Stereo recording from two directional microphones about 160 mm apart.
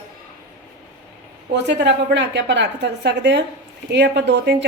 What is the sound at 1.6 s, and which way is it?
A woman's voice, 90° right.